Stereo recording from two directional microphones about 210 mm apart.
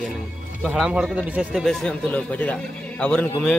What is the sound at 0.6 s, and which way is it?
A man's voice, centre (ahead or behind).